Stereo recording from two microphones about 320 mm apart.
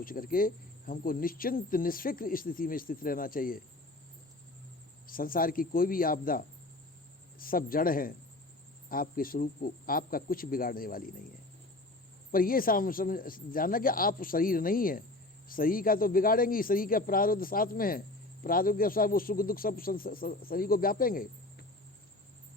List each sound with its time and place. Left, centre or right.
0.0 s speech: left
5.0 s speech: left
12.3 s speech: left